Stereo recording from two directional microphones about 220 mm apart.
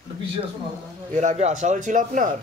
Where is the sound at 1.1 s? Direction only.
30° right (ahead or behind).